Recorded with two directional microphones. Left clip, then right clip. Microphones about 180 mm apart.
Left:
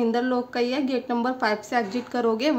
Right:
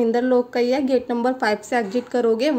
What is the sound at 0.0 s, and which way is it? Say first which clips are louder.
A woman's voice: right 6 dB; 20° right (ahead or behind).